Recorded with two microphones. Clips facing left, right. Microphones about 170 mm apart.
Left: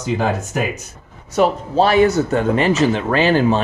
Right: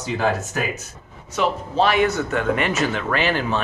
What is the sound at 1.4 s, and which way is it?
Speech, 40° left (ahead or behind).